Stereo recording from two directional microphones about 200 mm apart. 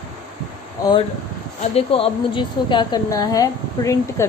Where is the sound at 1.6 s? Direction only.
30° left (ahead or behind).